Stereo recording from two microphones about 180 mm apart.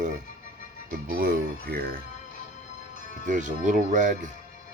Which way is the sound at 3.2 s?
45° right (ahead or behind).